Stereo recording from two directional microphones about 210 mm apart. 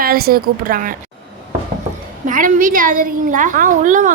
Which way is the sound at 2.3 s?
40° right (ahead or behind).